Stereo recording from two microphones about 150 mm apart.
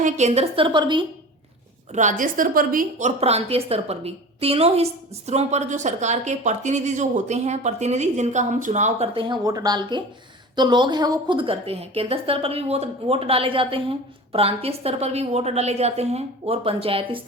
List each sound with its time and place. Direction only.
0.0 s a woman's voice: 50° right (ahead or behind); by 1.0 s 30° right (ahead or behind)
1.9 s a woman's voice: 55° right (ahead or behind)
3.2 s a woman's voice: 45° right (ahead or behind)
9.1 s a woman's voice: 30° right (ahead or behind)